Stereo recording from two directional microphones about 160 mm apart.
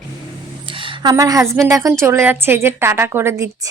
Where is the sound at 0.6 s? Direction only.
30° right (ahead or behind).